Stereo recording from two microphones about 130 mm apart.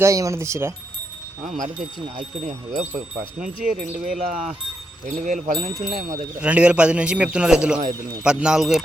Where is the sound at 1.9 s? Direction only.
40° right (ahead or behind).